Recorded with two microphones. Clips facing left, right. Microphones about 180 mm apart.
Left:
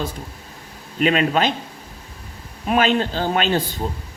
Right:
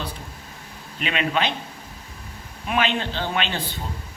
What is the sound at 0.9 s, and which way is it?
Speech, 40° left (ahead or behind).